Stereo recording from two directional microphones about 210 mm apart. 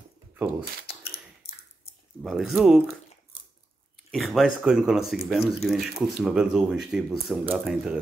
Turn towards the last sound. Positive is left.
turn(degrees=-5)  # may be behind; listen again after turning